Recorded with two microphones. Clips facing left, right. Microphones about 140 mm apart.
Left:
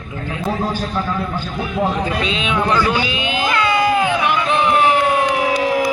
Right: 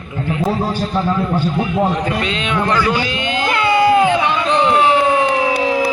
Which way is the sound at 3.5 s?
25° right (ahead or behind).